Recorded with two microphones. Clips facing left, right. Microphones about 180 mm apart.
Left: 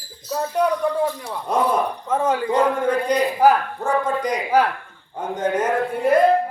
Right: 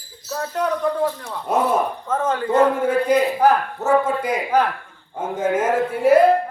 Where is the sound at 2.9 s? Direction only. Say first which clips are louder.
Right 2 dB; 5° right (ahead or behind).